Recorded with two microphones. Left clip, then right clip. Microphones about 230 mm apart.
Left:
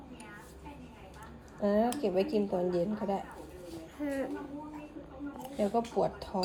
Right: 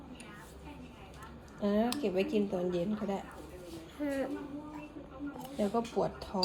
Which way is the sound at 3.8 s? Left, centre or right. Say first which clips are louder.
Even; centre.